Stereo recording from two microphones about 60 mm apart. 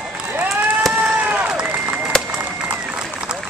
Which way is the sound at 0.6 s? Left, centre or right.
Right.